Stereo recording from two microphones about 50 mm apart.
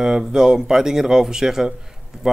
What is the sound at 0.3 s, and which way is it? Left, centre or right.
Speech, centre.